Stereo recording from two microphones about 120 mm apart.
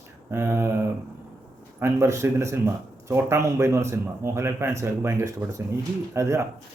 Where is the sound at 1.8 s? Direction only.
25° right (ahead or behind).